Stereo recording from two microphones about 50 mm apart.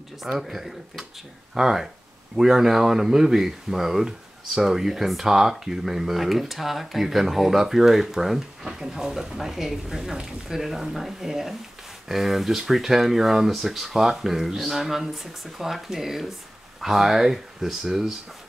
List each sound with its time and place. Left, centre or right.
0.3 s speech: centre